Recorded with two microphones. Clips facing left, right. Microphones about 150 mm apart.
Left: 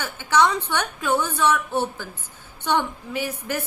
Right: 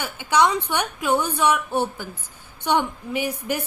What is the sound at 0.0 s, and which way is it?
A woman's voice, 15° right (ahead or behind).